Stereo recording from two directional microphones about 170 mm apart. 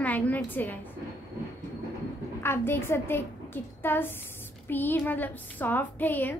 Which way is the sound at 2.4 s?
15° left (ahead or behind).